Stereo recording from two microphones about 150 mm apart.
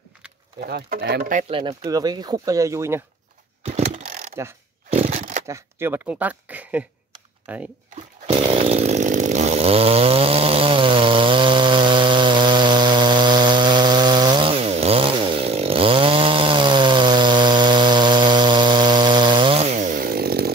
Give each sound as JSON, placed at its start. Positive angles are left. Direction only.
{"t": 0.6, "sound": "speech", "side_deg": -80}
{"t": 1.5, "sound": "speech", "side_deg": -35}
{"t": 1.9, "sound": "speech", "side_deg": -25}
{"t": 3.6, "sound": "a sound", "side_deg": -50}
{"t": 5.1, "sound": "a sound", "side_deg": -65}
{"t": 5.5, "sound": "speech", "side_deg": -15}
{"t": 8.3, "sound": "chainsaw", "side_deg": -35}